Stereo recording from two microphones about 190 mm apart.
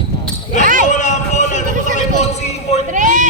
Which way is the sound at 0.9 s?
40° left (ahead or behind).